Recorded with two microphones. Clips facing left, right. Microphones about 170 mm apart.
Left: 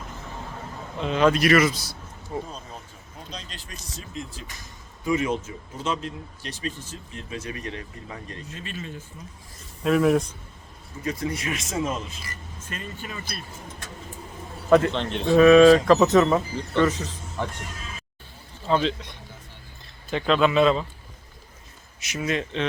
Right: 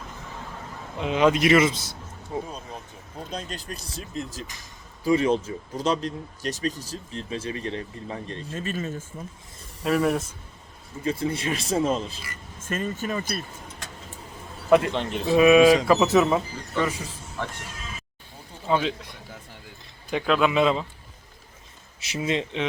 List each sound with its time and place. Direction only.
0.9 s speech: 15° right (ahead or behind)
3.2 s speech: 50° right (ahead or behind); by 8.5 s 30° right (ahead or behind)
8.5 s speech: 45° right (ahead or behind)
9.8 s speech: centre (ahead or behind)
11.0 s speech: 30° right (ahead or behind)
12.5 s speech: 45° right (ahead or behind)
14.7 s speech: 5° right (ahead or behind)
18.7 s speech: 10° right (ahead or behind)
20.1 s speech: 10° right (ahead or behind)
22.0 s speech: 30° right (ahead or behind)